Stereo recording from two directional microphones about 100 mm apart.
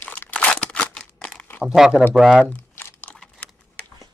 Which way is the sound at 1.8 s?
5° right (ahead or behind).